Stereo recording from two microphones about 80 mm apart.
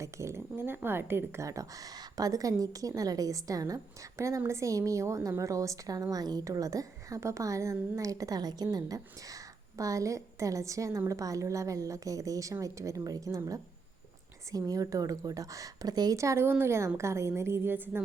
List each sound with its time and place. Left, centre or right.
0.0 s a woman's voice: right
1.5 s a woman's voice: right
16.1 s a woman's voice: right